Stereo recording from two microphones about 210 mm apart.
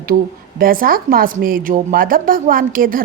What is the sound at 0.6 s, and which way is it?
A woman's voice, 45° right (ahead or behind).